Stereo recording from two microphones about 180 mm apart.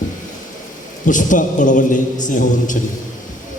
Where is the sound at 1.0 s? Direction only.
45° left (ahead or behind).